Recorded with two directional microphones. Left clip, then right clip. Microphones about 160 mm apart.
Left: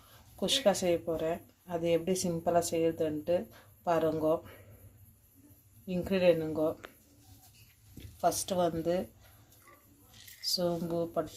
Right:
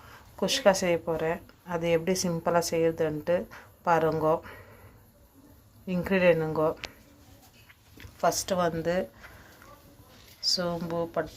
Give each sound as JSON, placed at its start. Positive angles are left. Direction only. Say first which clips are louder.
{"t": 0.3, "sound": "speech", "louder": "right 5 dB", "side_deg": 0}
{"t": 5.9, "sound": "speech", "louder": "right 4 dB", "side_deg": 0}
{"t": 8.2, "sound": "speech", "louder": "right 4 dB", "side_deg": 5}
{"t": 10.4, "sound": "speech", "louder": "right 3 dB", "side_deg": 10}